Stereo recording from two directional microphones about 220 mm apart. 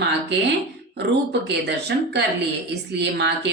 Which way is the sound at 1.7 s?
50° right (ahead or behind).